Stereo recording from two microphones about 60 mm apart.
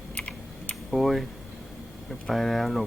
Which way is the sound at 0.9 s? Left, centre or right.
Centre.